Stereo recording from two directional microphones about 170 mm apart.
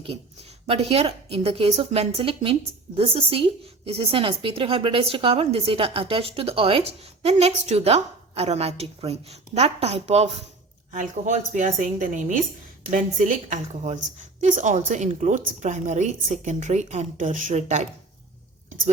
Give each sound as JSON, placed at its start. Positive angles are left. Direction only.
{"t": 0.7, "sound": "a woman's voice", "side_deg": -35}